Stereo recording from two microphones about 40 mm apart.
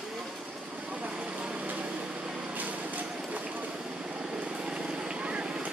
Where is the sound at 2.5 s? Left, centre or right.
Right.